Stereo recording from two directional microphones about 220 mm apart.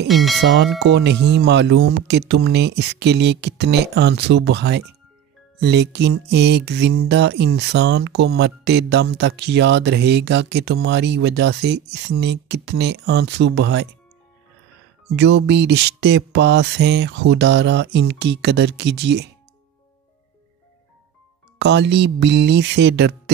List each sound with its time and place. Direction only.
0.1 s speech: centre (ahead or behind)
0.4 s speech: 50° right (ahead or behind)
15.1 s speech: 50° right (ahead or behind)
21.5 s speech: 50° right (ahead or behind)